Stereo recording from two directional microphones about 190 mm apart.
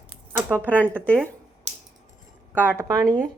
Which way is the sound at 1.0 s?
5° left (ahead or behind).